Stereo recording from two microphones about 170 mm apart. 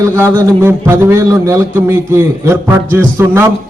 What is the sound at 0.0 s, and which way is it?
A man's voice, 15° right (ahead or behind).